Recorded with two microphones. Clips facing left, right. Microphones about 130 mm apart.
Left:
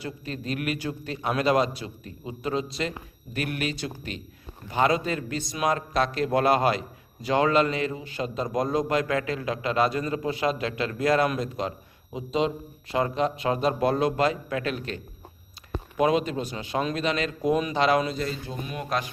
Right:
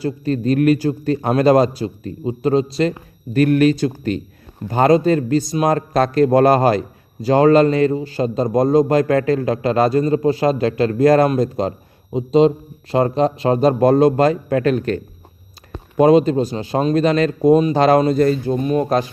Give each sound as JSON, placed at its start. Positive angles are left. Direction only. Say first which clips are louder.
{"t": 0.0, "sound": "a man's voice", "louder": "right 14 dB", "side_deg": -40}